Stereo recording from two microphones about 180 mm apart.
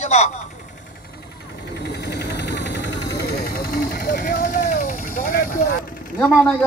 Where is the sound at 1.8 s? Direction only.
70° left (ahead or behind).